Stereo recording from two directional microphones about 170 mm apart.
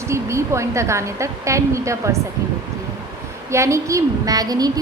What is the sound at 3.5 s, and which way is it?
A woman's voice, 15° right (ahead or behind).